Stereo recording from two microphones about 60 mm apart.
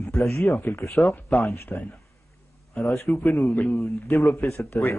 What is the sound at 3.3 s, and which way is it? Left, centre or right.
Speech, left.